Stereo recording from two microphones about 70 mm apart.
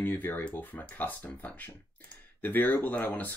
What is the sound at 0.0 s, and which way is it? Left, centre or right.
Speech, left.